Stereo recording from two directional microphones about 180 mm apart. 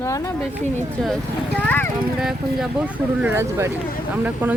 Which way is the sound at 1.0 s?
5° left (ahead or behind).